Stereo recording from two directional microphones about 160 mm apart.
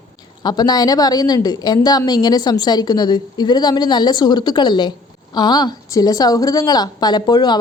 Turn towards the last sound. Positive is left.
turn(degrees=25)  # may be behind; listen again after turning